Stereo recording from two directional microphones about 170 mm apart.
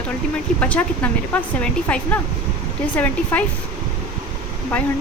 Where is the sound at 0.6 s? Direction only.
10° left (ahead or behind).